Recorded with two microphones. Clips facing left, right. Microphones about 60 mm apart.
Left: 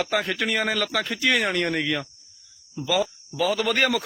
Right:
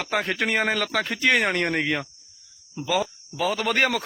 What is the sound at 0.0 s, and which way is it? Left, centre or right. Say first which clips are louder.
A man's voice: even; right.